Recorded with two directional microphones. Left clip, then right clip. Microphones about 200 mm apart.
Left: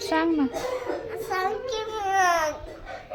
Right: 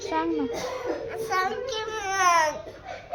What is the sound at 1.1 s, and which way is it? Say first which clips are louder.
Child singing: right 1 dB; 5° right (ahead or behind).